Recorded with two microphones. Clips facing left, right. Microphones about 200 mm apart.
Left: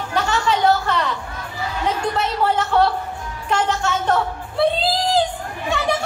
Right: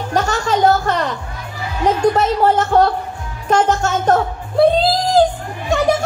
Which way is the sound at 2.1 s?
45° right (ahead or behind).